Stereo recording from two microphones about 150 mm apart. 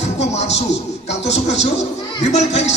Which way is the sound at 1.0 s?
45° left (ahead or behind).